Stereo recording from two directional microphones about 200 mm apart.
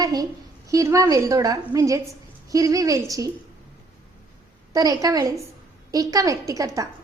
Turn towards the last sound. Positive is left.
turn(degrees=-15)  # may be behind; listen again after turning